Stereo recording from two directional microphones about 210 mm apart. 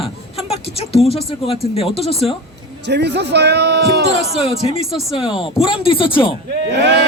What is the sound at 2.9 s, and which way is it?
Speech, 55° right (ahead or behind).